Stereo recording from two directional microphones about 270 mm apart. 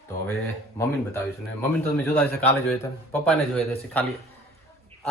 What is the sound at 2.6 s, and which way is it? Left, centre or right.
A man's voice, centre.